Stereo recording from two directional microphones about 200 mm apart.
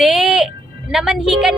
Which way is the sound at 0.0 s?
Centre (ahead or behind).